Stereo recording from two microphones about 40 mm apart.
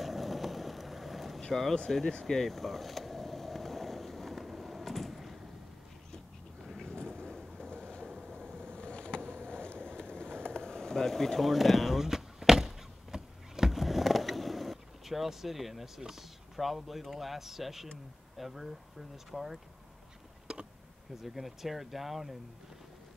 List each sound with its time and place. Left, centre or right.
0.0 s vehicle: centre
1.5 s speech: centre
2.2 s vehicle: centre
4.5 s a sound: centre
6.6 s vehicle: centre
6.9 s vehicle: centre
8.0 s vehicle: centre
8.6 s vehicle: left
10.1 s a sound: left; by 15.9 s centre
16.0 s speech: centre
20.5 s tick: centre
21.2 s speech: centre